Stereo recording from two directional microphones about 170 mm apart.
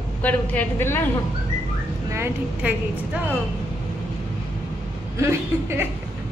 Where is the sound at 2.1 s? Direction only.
10° right (ahead or behind).